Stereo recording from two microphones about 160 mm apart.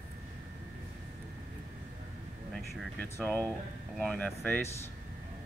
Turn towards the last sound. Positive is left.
turn(degrees=15)  # may be behind; listen again after turning